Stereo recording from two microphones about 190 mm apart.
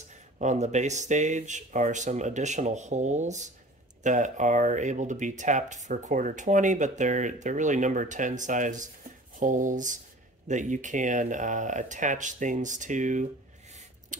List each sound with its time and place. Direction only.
0.4 s speech: 40° right (ahead or behind)